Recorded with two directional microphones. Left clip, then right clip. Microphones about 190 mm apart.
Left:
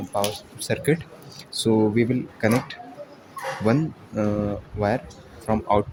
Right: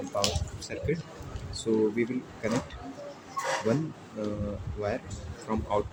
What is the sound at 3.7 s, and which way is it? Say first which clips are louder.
Speech: left 7 dB; 65° left (ahead or behind).